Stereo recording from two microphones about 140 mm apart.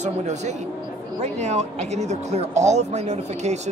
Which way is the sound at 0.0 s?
55° right (ahead or behind).